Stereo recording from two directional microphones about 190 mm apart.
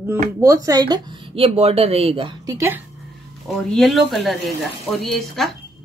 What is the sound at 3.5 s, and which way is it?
Speech, 5° left (ahead or behind).